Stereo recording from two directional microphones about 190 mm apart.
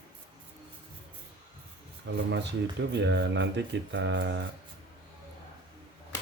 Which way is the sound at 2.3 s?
65° right (ahead or behind).